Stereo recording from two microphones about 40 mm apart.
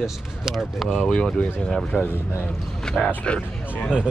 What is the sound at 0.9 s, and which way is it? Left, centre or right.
Speech, centre.